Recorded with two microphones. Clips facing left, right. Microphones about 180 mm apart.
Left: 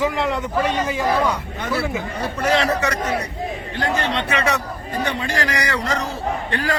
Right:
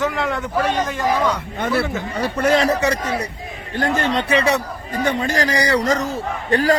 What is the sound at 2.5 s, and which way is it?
Speech, 40° right (ahead or behind).